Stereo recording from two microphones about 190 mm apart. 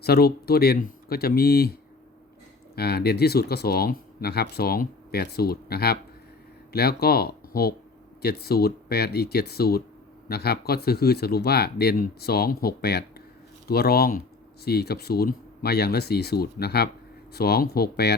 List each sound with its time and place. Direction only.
0.0 s speech: 55° left (ahead or behind)
2.7 s speech: 55° left (ahead or behind)